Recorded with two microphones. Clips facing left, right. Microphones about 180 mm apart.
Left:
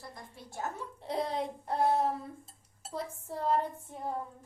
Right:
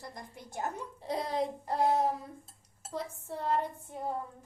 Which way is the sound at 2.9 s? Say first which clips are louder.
Even; 10° left (ahead or behind).